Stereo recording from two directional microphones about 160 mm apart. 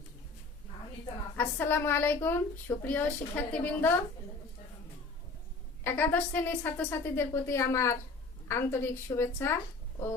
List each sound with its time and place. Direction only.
1.4 s a woman's voice: 15° left (ahead or behind)
5.8 s a woman's voice: 15° left (ahead or behind)